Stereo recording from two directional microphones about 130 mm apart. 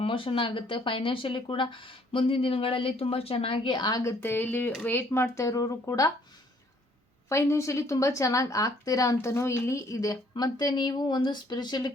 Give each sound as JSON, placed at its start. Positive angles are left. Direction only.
{"t": 0.0, "sound": "a woman's voice", "side_deg": 45}
{"t": 4.2, "sound": "speech", "side_deg": 15}
{"t": 7.3, "sound": "speech", "side_deg": 20}